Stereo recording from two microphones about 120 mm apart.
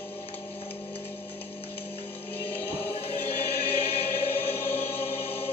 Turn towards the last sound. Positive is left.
turn(degrees=55)  # may be behind; listen again after turning